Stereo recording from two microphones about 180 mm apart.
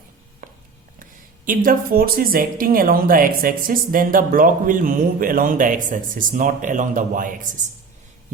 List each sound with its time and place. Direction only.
0.4 s chopping: 50° right (ahead or behind)
1.5 s speech: 50° right (ahead or behind)